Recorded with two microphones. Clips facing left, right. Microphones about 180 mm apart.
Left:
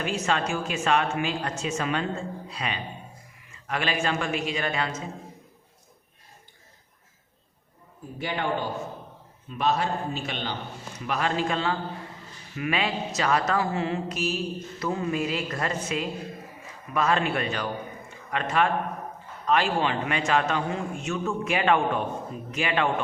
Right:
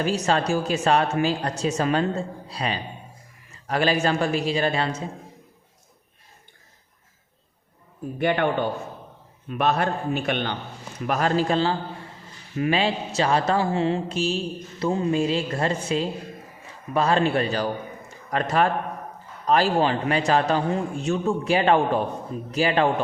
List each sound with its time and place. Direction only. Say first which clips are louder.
0.0 s a woman's voice: right 4 dB; 35° right (ahead or behind)
8.2 s a man's voice: right 6 dB; 60° right (ahead or behind)
11.0 s a woman's voice: right 5 dB; 45° right (ahead or behind)
18.1 s a sound: right 4 dB; 40° right (ahead or behind)
19.5 s a woman's voice: right 4 dB; 35° right (ahead or behind)